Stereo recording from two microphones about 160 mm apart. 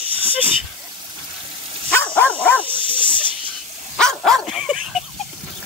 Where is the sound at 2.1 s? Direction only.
10° left (ahead or behind).